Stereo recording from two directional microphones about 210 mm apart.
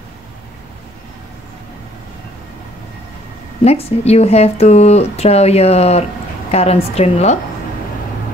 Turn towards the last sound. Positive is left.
turn(degrees=30)  # may be behind; listen again after turning